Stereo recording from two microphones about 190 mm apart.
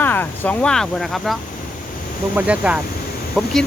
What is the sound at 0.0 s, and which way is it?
Speech, 10° left (ahead or behind).